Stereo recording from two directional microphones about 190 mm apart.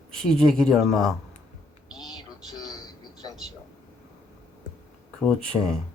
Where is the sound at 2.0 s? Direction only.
20° left (ahead or behind).